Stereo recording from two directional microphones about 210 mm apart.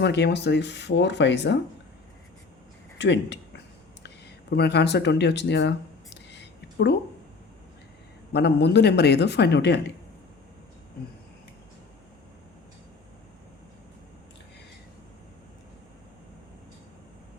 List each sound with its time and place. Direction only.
0.0 s speech: 55° left (ahead or behind)
3.0 s speech: 60° left (ahead or behind)
4.0 s a sound: 50° left (ahead or behind)
8.3 s speech: 55° left (ahead or behind)